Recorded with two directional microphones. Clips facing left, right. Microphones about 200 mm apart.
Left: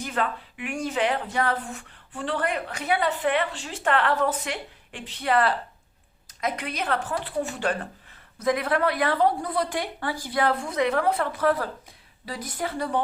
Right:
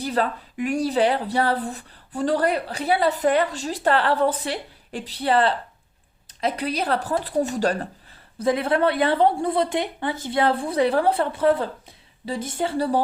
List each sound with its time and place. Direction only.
0.0 s a woman's voice: 35° right (ahead or behind)